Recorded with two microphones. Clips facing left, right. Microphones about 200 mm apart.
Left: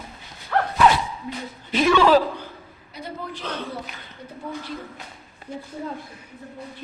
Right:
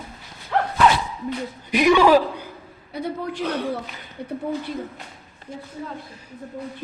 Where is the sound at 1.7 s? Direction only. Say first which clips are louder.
Right 2 dB; 15° right (ahead or behind).